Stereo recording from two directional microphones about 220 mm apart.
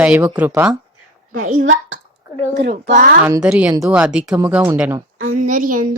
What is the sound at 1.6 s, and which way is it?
Speech, 60° right (ahead or behind).